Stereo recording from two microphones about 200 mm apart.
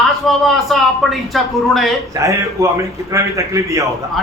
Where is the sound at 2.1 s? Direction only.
15° right (ahead or behind).